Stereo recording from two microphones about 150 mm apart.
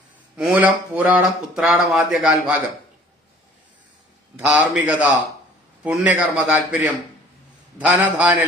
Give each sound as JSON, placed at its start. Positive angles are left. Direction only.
{"t": 0.3, "sound": "speech", "side_deg": -5}
{"t": 4.4, "sound": "a man's voice", "side_deg": -10}